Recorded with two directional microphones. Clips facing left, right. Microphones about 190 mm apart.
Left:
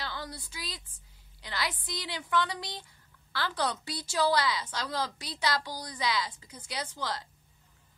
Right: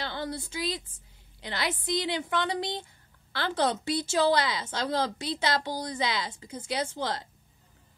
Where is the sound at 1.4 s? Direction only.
25° right (ahead or behind).